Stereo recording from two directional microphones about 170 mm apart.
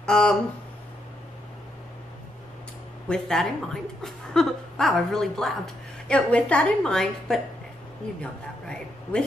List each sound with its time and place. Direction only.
0.0 s speech: 5° left (ahead or behind)
3.1 s speech: 5° left (ahead or behind)